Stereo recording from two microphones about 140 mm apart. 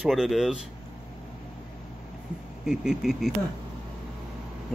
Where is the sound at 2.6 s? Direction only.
5° right (ahead or behind).